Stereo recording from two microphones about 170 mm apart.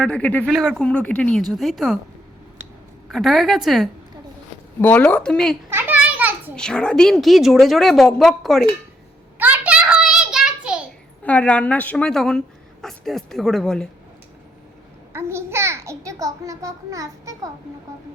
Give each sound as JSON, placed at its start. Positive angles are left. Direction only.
{"t": 0.0, "sound": "a woman's voice", "side_deg": 10}
{"t": 3.1, "sound": "a woman's voice", "side_deg": 0}
{"t": 5.7, "sound": "children playing", "side_deg": -10}
{"t": 6.6, "sound": "a woman's voice", "side_deg": 5}
{"t": 9.4, "sound": "a sound", "side_deg": -10}
{"t": 11.2, "sound": "a woman's voice", "side_deg": 10}
{"t": 15.1, "sound": "a child's voice", "side_deg": -15}